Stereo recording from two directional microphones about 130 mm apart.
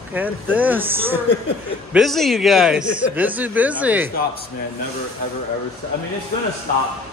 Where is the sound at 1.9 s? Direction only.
Centre (ahead or behind).